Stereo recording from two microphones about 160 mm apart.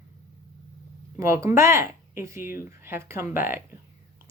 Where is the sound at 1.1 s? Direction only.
20° right (ahead or behind).